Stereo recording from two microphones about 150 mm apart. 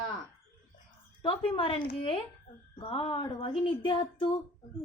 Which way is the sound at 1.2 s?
35° left (ahead or behind).